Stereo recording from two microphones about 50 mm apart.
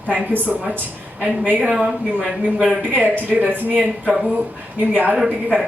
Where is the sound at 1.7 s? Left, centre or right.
Centre.